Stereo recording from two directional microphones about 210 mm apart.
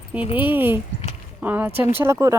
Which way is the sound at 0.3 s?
10° right (ahead or behind).